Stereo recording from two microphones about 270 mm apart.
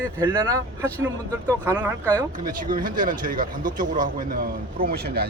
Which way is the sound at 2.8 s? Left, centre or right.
Right.